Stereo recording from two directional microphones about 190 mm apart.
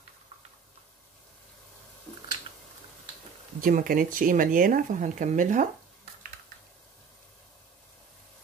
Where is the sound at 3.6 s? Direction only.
45° right (ahead or behind).